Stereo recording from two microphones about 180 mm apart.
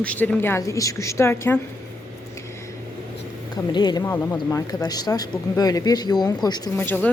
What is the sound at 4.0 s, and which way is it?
A woman's voice, 10° left (ahead or behind).